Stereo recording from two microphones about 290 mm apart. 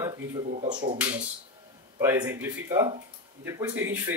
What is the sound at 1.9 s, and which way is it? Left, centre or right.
Speech, centre.